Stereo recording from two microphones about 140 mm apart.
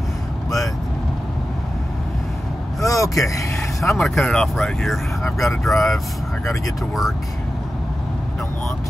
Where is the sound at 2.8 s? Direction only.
25° left (ahead or behind).